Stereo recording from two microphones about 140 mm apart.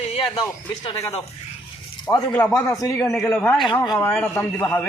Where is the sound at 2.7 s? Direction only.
25° left (ahead or behind).